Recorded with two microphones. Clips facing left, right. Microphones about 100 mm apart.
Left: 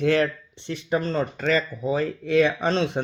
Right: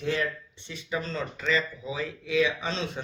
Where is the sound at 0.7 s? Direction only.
55° left (ahead or behind).